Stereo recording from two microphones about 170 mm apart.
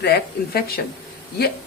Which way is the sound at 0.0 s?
70° left (ahead or behind).